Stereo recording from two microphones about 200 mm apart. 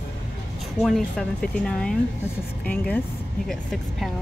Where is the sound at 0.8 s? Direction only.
Centre (ahead or behind).